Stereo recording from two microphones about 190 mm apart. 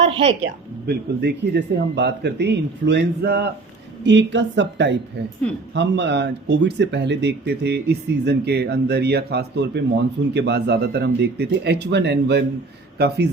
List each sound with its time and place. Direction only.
0.1 s a woman's voice: 35° right (ahead or behind)
0.4 s speech: 65° right (ahead or behind)
4.0 s a woman's voice: 70° right (ahead or behind)